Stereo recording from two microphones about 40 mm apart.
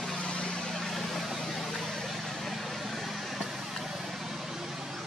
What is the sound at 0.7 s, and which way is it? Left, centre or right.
Vehicle, centre.